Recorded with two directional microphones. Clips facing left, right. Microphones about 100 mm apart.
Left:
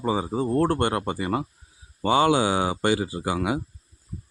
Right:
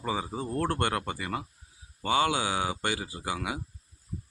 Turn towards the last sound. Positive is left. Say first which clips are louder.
# left 8 dB
turn(degrees=35)  # may be behind; listen again after turning